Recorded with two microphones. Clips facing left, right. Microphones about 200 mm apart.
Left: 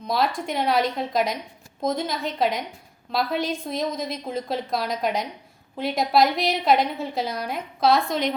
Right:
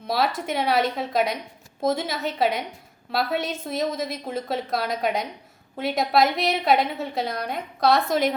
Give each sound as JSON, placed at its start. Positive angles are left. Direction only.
{"t": 0.1, "sound": "a woman's voice", "side_deg": 0}